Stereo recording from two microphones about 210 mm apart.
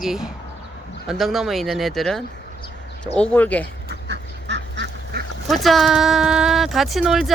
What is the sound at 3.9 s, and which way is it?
Duck, 55° right (ahead or behind).